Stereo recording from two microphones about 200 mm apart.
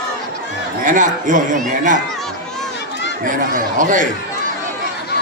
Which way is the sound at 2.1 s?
Centre (ahead or behind).